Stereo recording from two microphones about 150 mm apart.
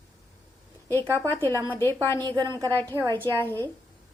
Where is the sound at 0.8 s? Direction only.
10° left (ahead or behind).